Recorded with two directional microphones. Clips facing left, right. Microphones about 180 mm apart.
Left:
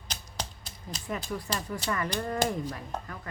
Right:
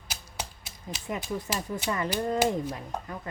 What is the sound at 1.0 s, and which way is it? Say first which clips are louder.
Speech: right 2 dB; 20° right (ahead or behind).